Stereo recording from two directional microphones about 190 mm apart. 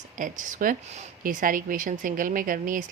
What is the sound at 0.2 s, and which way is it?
Speech, 45° right (ahead or behind).